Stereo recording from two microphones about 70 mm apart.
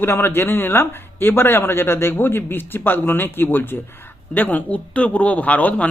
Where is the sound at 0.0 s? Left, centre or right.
Left.